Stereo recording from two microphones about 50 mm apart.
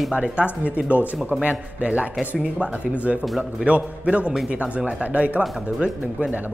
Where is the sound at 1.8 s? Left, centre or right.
Right.